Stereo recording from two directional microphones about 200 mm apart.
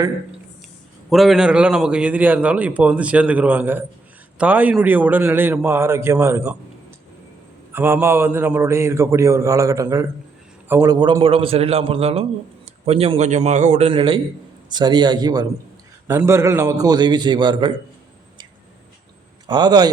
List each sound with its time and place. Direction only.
1.1 s a man's voice: centre (ahead or behind)
7.7 s a man's voice: 10° right (ahead or behind)
19.5 s a man's voice: 20° right (ahead or behind)